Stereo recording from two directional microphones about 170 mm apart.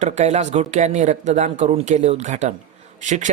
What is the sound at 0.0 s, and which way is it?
Speech, 40° right (ahead or behind).